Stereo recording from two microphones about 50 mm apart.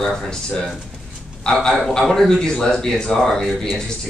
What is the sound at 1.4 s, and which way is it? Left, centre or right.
Speech, centre.